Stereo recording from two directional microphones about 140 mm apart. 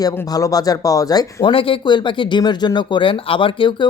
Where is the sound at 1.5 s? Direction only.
40° left (ahead or behind).